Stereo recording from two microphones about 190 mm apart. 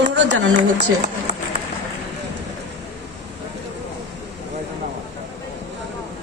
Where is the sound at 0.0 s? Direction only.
70° right (ahead or behind).